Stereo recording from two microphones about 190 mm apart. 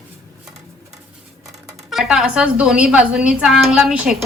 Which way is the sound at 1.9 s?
Centre (ahead or behind).